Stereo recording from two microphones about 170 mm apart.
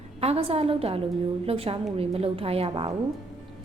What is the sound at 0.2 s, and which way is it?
A woman's voice, 35° right (ahead or behind).